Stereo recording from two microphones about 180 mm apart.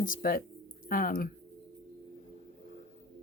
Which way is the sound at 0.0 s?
50° left (ahead or behind).